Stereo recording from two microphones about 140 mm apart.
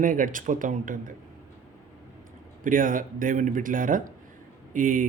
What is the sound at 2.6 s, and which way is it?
Speech, 75° right (ahead or behind).